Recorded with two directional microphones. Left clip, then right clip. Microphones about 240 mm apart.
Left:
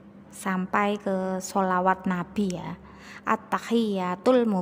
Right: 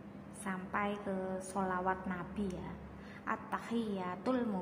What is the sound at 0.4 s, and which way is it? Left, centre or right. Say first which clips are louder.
A woman's voice: left 12 dB; left.